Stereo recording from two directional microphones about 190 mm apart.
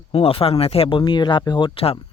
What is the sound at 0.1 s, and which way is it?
Speech, 30° left (ahead or behind).